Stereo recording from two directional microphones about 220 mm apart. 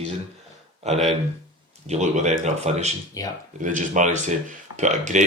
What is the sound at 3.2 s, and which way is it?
Speech, 15° left (ahead or behind).